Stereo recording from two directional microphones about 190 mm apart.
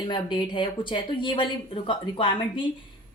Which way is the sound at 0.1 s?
25° left (ahead or behind).